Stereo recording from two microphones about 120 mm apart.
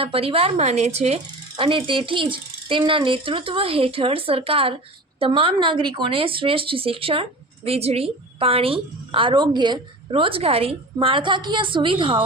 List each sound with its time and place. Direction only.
0.0 s a woman's voice: 50° right (ahead or behind)
1.5 s speech: 45° right (ahead or behind)